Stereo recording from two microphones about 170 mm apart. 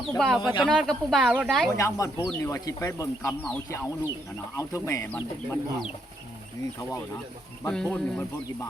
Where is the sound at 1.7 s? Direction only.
20° left (ahead or behind).